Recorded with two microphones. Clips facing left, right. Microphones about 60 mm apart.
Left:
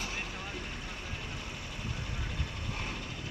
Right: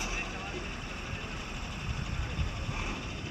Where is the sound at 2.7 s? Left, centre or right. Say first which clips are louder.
Right 2 dB; centre.